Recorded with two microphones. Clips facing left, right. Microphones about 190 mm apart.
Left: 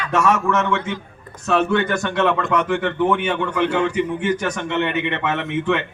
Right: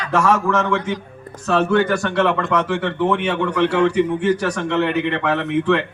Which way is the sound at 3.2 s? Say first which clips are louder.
Right 2 dB; 70° right (ahead or behind).